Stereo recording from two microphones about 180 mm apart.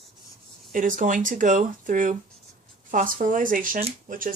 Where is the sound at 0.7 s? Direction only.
45° right (ahead or behind).